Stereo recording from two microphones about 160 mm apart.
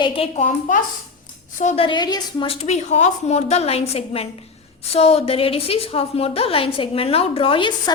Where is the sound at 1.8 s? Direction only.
25° left (ahead or behind).